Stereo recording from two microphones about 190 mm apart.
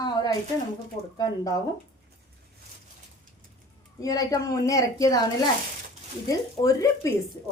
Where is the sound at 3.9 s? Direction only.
20° left (ahead or behind).